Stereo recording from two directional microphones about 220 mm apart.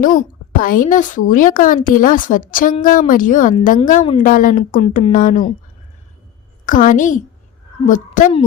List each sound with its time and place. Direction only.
0.5 s speech: 40° left (ahead or behind)
6.7 s speech: 35° left (ahead or behind)